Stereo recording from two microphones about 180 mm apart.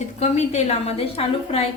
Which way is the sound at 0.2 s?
40° left (ahead or behind).